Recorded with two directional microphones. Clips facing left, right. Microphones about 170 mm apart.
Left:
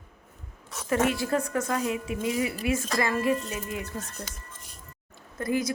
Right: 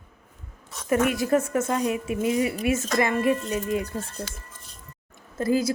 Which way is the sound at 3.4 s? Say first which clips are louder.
Right 8 dB; 35° right (ahead or behind).